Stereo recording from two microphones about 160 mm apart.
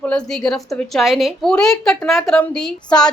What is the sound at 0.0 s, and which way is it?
A woman's voice, 5° left (ahead or behind).